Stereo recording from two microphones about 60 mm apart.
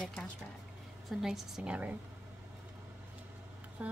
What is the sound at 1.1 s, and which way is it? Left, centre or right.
Speech, centre.